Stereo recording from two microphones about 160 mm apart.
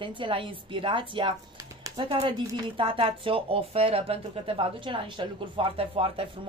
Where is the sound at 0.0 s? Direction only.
30° right (ahead or behind).